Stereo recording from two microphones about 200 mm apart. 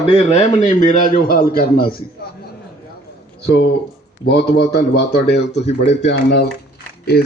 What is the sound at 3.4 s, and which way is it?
Speech, 55° left (ahead or behind).